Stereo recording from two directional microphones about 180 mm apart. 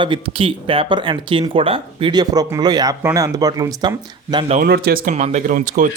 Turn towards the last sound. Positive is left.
turn(degrees=-45)  # may be behind; listen again after turning